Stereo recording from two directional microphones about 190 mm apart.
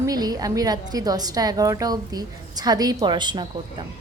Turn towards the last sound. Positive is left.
turn(degrees=-25)  # may be behind; listen again after turning